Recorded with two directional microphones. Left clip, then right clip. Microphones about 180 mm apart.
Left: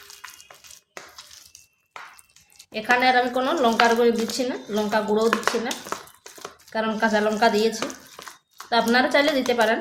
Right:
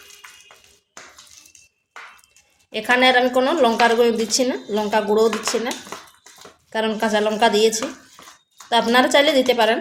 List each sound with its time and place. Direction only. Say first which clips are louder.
2.7 s speech: right 3 dB; 25° right (ahead or behind)
6.7 s speech: right 2 dB; 25° right (ahead or behind)